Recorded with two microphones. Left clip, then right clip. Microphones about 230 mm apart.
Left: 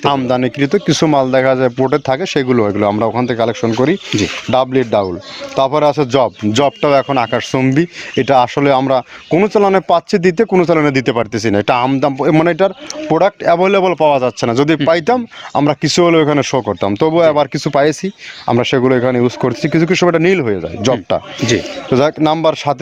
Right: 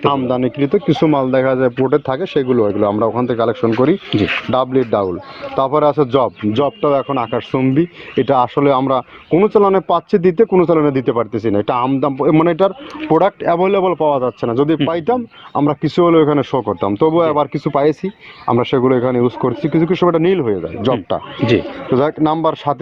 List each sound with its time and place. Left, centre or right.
0.0 s speech: left